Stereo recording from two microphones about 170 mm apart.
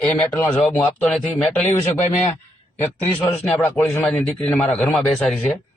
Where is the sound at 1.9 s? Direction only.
40° left (ahead or behind).